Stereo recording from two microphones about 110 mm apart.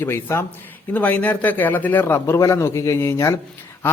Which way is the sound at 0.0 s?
25° left (ahead or behind).